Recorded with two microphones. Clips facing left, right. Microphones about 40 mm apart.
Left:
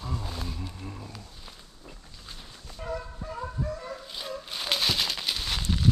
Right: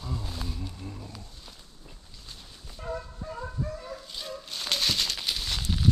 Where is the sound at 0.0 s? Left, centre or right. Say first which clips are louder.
Left 1 dB; centre.